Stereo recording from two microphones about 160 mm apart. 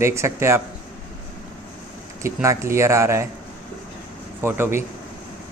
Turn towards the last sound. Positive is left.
turn(degrees=-15)  # may be behind; listen again after turning